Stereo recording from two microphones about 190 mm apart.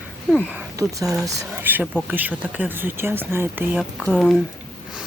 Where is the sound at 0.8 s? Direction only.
15° right (ahead or behind).